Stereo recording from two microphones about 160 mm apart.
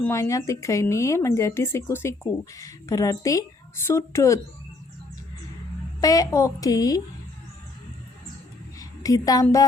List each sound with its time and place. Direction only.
0.0 s speech: 20° left (ahead or behind)
6.0 s speech: 20° left (ahead or behind)
8.8 s a woman's voice: 20° left (ahead or behind)